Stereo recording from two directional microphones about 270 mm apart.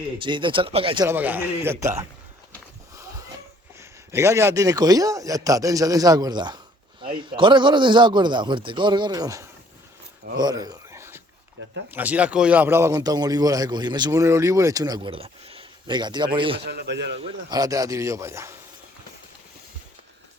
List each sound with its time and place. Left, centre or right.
0.2 s speech: centre
1.0 s speech: centre
2.9 s a sound: centre
3.8 s speech: centre
10.3 s a sound: centre
11.9 s speech: centre
16.6 s a man's voice: right
17.2 s speech: centre